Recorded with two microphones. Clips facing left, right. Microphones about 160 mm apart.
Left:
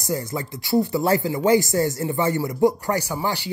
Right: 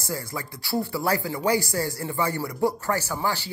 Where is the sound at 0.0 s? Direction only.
20° left (ahead or behind).